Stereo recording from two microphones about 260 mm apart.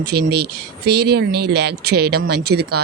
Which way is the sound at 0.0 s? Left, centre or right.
Right.